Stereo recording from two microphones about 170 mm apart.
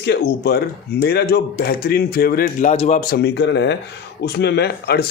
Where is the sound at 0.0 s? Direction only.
75° left (ahead or behind).